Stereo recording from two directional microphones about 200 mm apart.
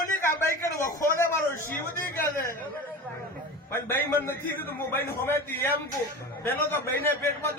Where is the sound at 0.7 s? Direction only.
45° left (ahead or behind).